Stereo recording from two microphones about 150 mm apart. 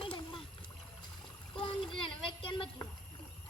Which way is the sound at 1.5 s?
35° left (ahead or behind).